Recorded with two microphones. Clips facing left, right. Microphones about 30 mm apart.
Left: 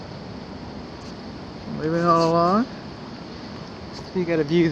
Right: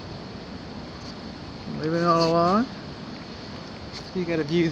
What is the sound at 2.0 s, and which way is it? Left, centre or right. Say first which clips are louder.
Speech: left 2 dB; right.